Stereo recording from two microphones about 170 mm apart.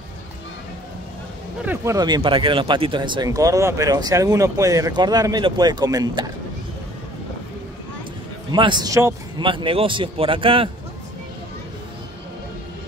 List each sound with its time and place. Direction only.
1.6 s speech: 10° right (ahead or behind)
2.0 s speech: 25° right (ahead or behind)
8.5 s speech: 25° right (ahead or behind)